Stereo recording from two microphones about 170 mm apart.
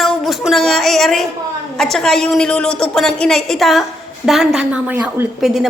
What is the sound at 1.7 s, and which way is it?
A woman's voice, 5° left (ahead or behind).